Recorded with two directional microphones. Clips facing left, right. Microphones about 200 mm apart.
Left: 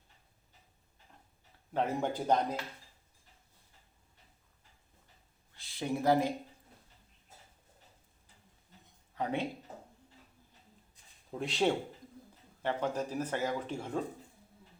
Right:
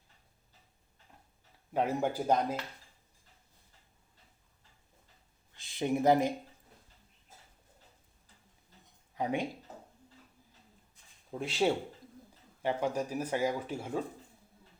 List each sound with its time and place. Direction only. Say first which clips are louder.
1.7 s speech: right 2 dB; 10° right (ahead or behind)
5.5 s speech: right 4 dB; 20° right (ahead or behind)
9.1 s speech: right 1 dB; 15° right (ahead or behind)
11.3 s speech: right 1 dB; centre (ahead or behind)